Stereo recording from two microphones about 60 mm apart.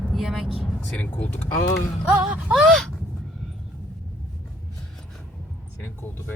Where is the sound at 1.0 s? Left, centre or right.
Left.